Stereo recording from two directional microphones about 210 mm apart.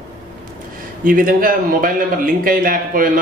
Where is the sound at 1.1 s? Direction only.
40° right (ahead or behind).